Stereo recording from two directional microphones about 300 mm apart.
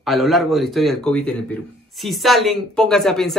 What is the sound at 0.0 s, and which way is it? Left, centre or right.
A man's voice, centre.